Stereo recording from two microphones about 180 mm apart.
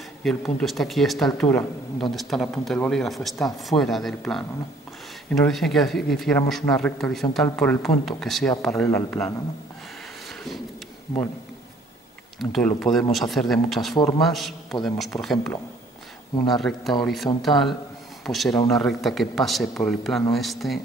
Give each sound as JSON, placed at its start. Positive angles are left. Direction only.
{"t": 0.2, "sound": "speech", "side_deg": 0}
{"t": 8.8, "sound": "a man's voice", "side_deg": 15}
{"t": 12.4, "sound": "speech", "side_deg": 0}
{"t": 13.9, "sound": "a man's voice", "side_deg": 20}
{"t": 14.2, "sound": "speech", "side_deg": 0}
{"t": 16.4, "sound": "a man's voice", "side_deg": 0}